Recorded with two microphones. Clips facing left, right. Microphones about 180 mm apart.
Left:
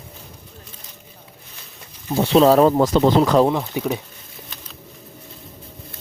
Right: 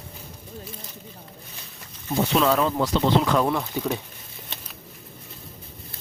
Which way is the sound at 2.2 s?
30° left (ahead or behind).